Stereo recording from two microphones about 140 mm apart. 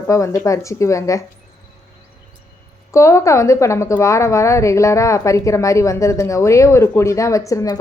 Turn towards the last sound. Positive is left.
turn(degrees=25)  # may be behind; listen again after turning